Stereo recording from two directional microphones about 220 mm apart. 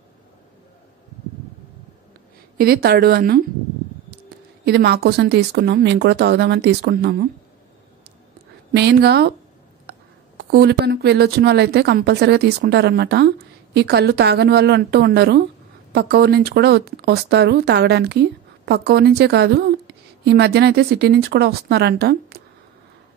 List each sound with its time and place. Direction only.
2.5 s speech: 45° right (ahead or behind)
4.6 s speech: 45° right (ahead or behind)
8.7 s speech: 50° right (ahead or behind)